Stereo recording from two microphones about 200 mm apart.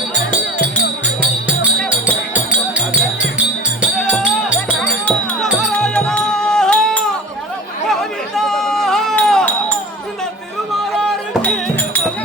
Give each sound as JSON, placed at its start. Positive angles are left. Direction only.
{"t": 1.8, "sound": "music", "side_deg": 10}
{"t": 3.8, "sound": "music", "side_deg": 5}
{"t": 8.4, "sound": "chink", "side_deg": 0}
{"t": 10.9, "sound": "music", "side_deg": 5}